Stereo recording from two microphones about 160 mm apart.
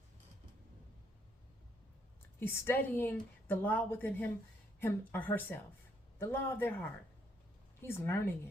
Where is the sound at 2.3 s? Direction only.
15° left (ahead or behind).